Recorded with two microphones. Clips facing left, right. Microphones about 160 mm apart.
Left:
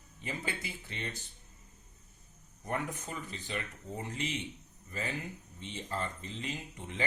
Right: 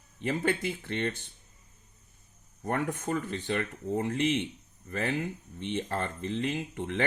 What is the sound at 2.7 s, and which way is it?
Speech, 65° right (ahead or behind).